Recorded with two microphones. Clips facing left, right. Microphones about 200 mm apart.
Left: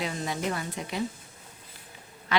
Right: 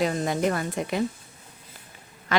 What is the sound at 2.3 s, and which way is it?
Speech, 45° right (ahead or behind).